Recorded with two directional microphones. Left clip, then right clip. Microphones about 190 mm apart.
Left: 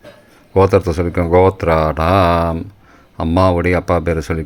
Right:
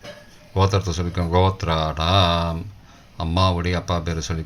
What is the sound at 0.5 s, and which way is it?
Speech, 40° left (ahead or behind).